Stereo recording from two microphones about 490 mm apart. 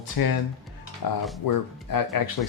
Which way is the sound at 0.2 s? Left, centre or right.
Left.